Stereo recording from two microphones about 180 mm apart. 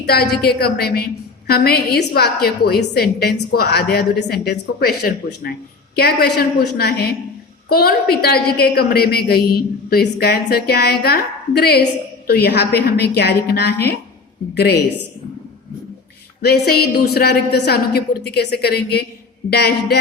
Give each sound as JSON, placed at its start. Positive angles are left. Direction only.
{"t": 0.0, "sound": "a woman's voice", "side_deg": 60}
{"t": 16.4, "sound": "a woman's voice", "side_deg": 60}